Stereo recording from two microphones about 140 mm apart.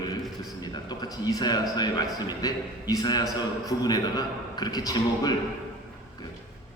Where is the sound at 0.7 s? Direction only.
30° left (ahead or behind).